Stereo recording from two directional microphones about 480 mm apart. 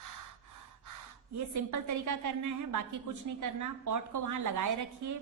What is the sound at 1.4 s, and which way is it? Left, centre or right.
A woman's voice, right.